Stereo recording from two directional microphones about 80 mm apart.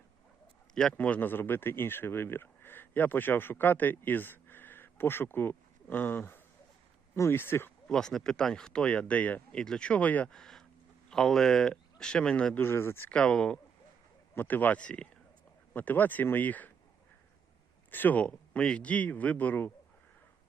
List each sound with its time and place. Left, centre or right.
0.7 s a man's voice: centre
0.9 s speech: centre
7.9 s speech: centre
10.3 s a sound: centre
11.1 s speech: centre
12.5 s speech: left
13.1 s speech: centre
14.3 s speech: left
17.9 s speech: left